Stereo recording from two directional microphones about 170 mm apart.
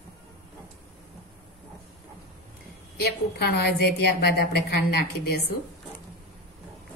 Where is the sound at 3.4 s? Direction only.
70° left (ahead or behind).